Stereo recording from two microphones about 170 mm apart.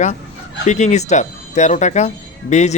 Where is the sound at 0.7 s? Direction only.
45° left (ahead or behind).